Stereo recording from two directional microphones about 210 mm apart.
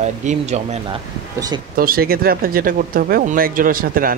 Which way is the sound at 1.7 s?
45° right (ahead or behind).